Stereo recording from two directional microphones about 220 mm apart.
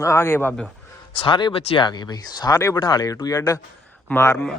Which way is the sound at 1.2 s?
20° left (ahead or behind).